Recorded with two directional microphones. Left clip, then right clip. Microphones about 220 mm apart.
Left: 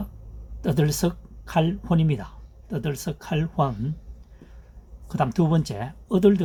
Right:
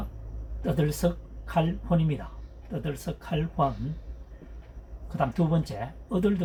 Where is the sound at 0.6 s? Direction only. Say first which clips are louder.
Left 3 dB; 60° left (ahead or behind).